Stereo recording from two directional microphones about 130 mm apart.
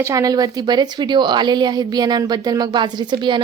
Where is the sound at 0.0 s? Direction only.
25° right (ahead or behind).